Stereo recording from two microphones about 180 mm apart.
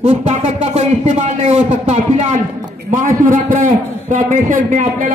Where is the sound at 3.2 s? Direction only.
50° right (ahead or behind).